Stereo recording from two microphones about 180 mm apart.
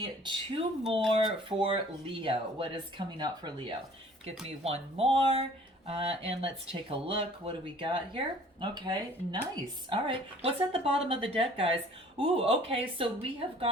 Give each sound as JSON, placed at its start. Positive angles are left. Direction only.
{"t": 0.0, "sound": "speech", "side_deg": -25}